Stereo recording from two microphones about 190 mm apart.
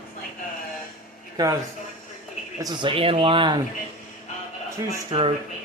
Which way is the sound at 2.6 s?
20° right (ahead or behind).